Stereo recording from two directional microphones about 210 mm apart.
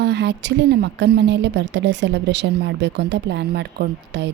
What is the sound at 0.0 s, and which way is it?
A woman's voice, 55° right (ahead or behind).